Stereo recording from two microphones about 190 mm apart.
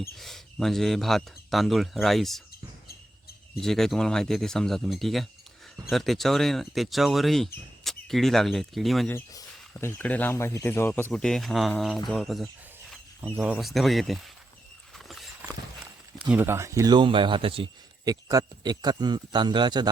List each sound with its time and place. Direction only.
0.2 s speech: centre (ahead or behind)
3.6 s speech: centre (ahead or behind)
9.1 s speech: 15° left (ahead or behind)
14.9 s horse: centre (ahead or behind)
16.3 s a man's voice: 10° right (ahead or behind)